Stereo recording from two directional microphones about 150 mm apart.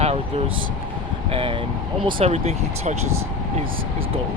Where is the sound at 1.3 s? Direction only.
40° right (ahead or behind).